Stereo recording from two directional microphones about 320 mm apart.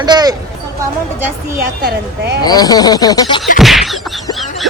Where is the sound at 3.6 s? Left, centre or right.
Centre.